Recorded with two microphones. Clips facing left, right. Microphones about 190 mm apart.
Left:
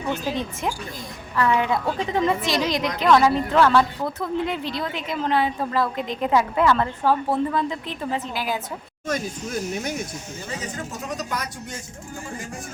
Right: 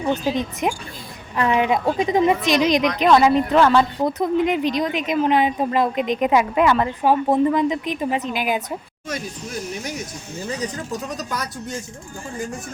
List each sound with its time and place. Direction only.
0.1 s a woman's voice: 15° right (ahead or behind)
11.2 s speech: 35° right (ahead or behind)